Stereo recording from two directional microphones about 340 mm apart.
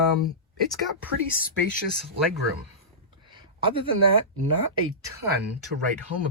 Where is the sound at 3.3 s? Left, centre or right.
Centre.